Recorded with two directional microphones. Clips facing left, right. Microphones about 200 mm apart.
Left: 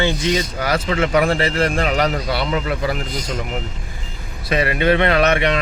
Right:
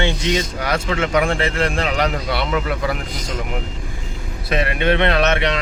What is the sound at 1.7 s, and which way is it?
Speech, 45° left (ahead or behind).